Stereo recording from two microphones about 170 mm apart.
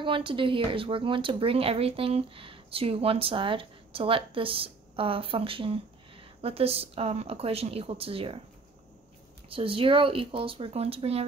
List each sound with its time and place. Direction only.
0.0 s speech: 30° right (ahead or behind)
9.5 s speech: 35° right (ahead or behind)